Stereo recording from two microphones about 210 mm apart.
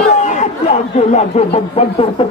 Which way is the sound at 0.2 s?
35° left (ahead or behind).